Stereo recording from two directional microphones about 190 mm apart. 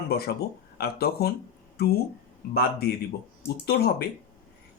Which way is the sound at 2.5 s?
55° left (ahead or behind).